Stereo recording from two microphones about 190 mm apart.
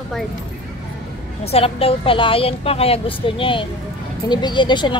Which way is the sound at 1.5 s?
30° left (ahead or behind).